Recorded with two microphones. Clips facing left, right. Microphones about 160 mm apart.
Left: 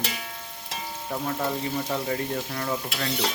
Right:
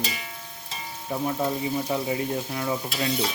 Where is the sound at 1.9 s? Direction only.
15° right (ahead or behind).